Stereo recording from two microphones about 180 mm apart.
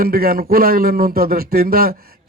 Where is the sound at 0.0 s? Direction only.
55° right (ahead or behind).